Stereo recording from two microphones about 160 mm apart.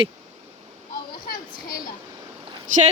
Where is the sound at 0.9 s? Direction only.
65° left (ahead or behind).